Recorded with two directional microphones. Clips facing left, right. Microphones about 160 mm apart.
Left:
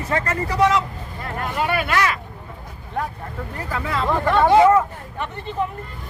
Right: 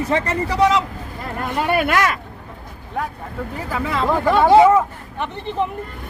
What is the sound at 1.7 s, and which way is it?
Speech, 50° right (ahead or behind).